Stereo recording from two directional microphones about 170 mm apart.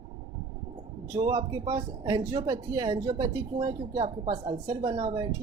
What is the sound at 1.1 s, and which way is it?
Speech, 25° right (ahead or behind).